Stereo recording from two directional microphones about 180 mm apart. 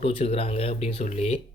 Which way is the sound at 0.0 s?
35° left (ahead or behind).